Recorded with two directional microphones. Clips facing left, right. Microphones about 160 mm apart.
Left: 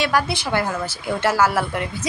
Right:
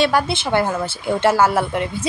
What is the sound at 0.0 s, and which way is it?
A woman's voice, 25° right (ahead or behind).